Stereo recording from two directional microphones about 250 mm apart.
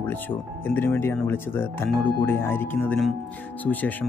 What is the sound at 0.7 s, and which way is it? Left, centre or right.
Speech, centre.